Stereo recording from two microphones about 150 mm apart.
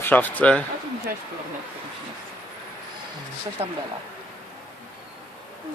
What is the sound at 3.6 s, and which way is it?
Speech, 40° right (ahead or behind).